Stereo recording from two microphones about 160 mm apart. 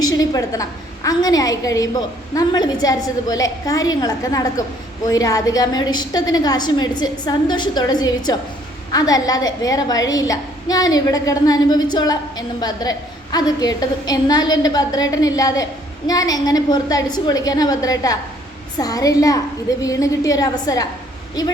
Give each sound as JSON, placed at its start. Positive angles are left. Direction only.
{"t": 0.0, "sound": "a woman's voice", "side_deg": 25}